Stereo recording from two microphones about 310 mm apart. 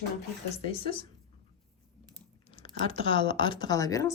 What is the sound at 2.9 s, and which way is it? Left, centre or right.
Speech, centre.